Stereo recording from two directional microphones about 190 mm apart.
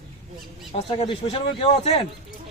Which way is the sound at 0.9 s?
25° left (ahead or behind).